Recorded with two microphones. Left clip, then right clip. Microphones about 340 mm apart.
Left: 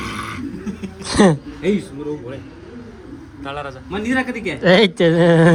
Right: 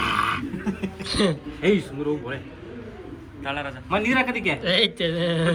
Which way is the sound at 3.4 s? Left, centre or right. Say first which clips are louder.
Left 1 dB; centre.